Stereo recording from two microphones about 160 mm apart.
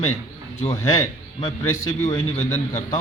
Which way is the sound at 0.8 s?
20° left (ahead or behind).